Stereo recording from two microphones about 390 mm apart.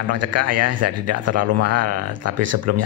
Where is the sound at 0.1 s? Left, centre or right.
Right.